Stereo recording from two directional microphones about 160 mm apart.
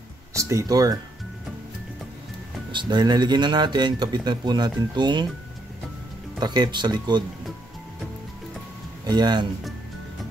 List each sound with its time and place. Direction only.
0.3 s speech: 20° right (ahead or behind)
2.7 s speech: 30° right (ahead or behind)
6.4 s speech: 25° right (ahead or behind)
9.0 s speech: 25° right (ahead or behind)